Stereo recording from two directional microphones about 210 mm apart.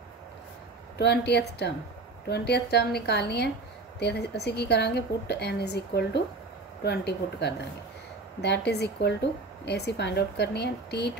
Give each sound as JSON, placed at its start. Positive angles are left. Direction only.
{"t": 0.9, "sound": "a woman's voice", "side_deg": 50}